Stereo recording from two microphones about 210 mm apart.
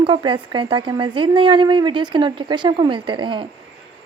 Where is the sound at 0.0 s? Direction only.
25° right (ahead or behind).